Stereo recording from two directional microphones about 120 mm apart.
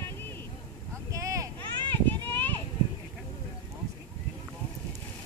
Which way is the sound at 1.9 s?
15° left (ahead or behind).